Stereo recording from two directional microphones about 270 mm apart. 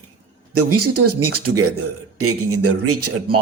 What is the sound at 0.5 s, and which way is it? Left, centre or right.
Speech, right.